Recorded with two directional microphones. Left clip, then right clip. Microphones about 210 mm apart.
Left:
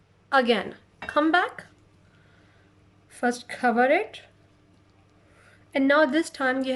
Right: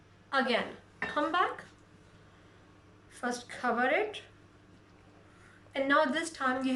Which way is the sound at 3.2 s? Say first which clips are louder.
Left 9 dB; 45° left (ahead or behind).